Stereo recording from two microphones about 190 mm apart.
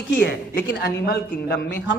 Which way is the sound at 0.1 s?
55° left (ahead or behind).